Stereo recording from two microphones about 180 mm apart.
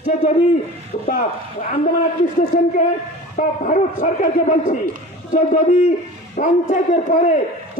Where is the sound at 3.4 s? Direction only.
50° left (ahead or behind).